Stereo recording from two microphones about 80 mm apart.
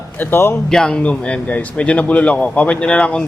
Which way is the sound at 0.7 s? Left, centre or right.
Centre.